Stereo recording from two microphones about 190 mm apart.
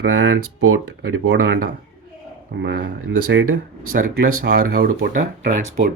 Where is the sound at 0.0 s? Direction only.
90° right.